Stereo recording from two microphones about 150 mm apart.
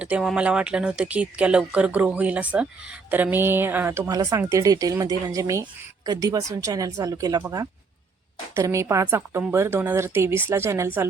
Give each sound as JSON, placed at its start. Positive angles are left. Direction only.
{"t": 0.0, "sound": "speech", "side_deg": -5}